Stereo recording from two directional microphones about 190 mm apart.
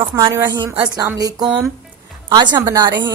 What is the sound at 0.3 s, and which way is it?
Speech, 20° right (ahead or behind).